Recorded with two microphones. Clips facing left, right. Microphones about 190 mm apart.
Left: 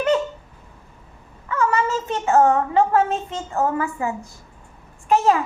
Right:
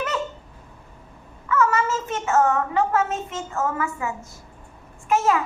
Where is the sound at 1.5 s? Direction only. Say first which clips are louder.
Even; 35° left (ahead or behind).